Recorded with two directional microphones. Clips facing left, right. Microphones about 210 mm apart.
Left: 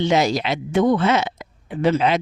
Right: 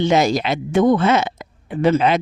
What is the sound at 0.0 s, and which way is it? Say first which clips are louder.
Speech: right 2 dB; 50° right (ahead or behind).